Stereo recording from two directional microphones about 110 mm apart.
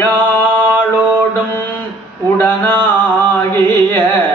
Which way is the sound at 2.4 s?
20° left (ahead or behind).